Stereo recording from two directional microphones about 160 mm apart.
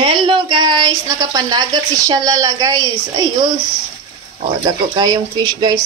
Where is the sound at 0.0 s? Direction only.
30° right (ahead or behind).